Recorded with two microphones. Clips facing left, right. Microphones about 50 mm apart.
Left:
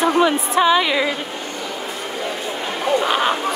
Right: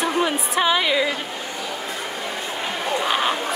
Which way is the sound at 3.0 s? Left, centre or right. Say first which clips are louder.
Left 3 dB; centre.